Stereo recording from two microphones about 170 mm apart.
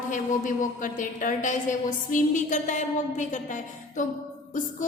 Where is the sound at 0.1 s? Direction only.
50° left (ahead or behind).